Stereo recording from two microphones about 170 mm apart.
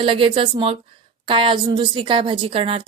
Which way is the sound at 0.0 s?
30° right (ahead or behind).